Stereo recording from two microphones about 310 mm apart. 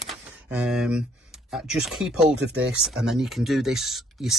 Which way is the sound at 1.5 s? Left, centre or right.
Centre.